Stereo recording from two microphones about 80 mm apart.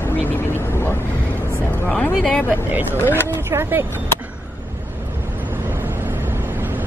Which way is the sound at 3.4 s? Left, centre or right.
Right.